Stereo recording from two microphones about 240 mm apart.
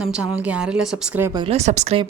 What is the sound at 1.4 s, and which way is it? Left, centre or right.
Speech, right.